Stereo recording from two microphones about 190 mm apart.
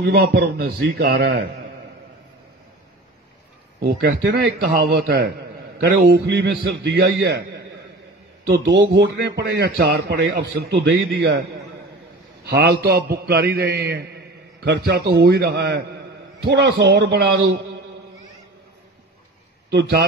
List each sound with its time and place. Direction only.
0.0 s a man's voice: 55° right (ahead or behind)
3.8 s a man's voice: 55° right (ahead or behind)
19.7 s a man's voice: 60° right (ahead or behind)